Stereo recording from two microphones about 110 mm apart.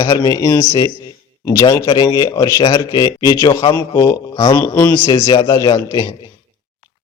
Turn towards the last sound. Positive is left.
turn(degrees=35)  # may be behind; listen again after turning